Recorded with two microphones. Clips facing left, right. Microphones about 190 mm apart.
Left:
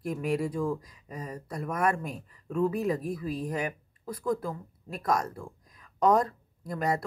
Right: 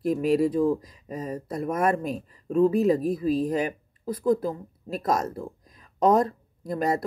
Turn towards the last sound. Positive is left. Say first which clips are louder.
# right 4 dB
turn(degrees=-20)  # may be behind; listen again after turning